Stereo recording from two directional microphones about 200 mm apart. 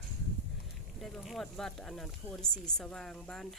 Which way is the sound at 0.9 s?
Centre (ahead or behind).